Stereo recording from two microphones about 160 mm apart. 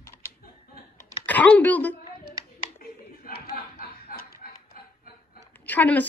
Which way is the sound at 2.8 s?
75° left (ahead or behind).